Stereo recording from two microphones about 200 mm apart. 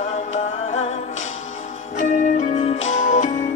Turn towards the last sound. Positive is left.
turn(degrees=35)  # may be behind; listen again after turning